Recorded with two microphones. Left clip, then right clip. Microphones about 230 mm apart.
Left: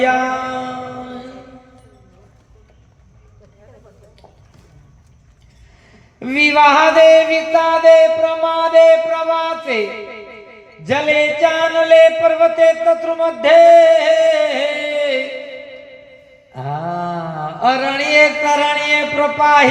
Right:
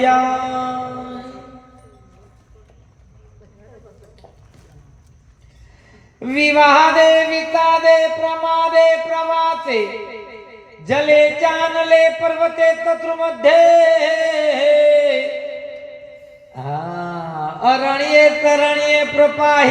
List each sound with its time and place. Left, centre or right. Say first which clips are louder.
0.0 s mantra: right 1 dB; left
6.1 s music: left 1 dB; left
16.5 s mantra: left 3 dB; left